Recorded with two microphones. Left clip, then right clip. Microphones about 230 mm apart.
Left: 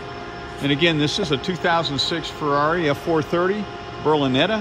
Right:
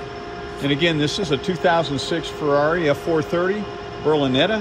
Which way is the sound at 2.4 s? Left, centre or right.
Centre.